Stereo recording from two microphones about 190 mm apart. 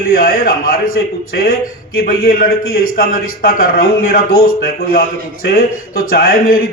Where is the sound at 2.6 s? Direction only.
90° left.